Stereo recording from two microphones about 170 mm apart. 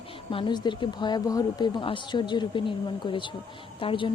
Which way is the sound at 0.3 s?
30° left (ahead or behind).